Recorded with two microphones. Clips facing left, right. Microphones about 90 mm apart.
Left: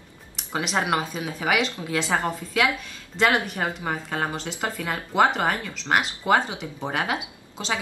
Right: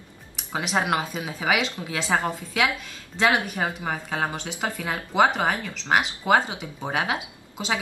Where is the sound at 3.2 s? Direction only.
5° right (ahead or behind).